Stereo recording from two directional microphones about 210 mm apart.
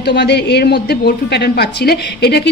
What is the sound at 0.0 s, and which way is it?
A woman's voice, 50° left (ahead or behind).